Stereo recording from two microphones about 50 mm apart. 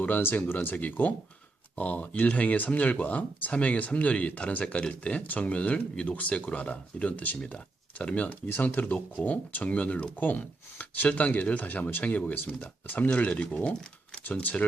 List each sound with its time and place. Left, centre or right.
0.0 s speech: left
7.3 s speech: centre
8.1 s speech: left
8.4 s speech: left